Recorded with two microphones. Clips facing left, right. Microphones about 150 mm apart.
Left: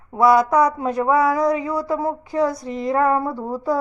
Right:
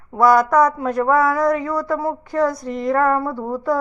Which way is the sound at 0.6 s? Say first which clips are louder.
Right 1 dB; 30° left (ahead or behind).